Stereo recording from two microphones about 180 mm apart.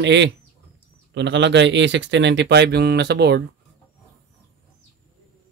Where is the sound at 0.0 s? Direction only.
80° right.